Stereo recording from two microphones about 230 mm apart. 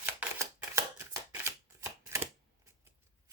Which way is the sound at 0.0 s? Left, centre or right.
Centre.